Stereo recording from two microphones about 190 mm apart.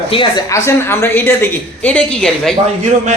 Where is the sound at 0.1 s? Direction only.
25° left (ahead or behind); by 2.6 s 5° left (ahead or behind).